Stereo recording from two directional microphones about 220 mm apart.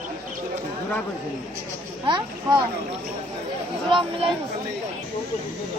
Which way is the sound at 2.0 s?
20° right (ahead or behind).